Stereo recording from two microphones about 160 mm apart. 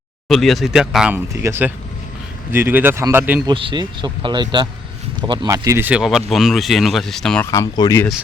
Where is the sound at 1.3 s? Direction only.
15° right (ahead or behind).